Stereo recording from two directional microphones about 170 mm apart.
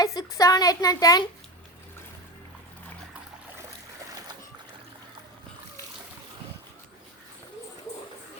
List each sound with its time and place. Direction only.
0.0 s a woman's voice: 20° left (ahead or behind)